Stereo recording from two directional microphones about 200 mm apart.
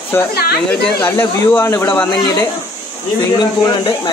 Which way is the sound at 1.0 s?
10° left (ahead or behind).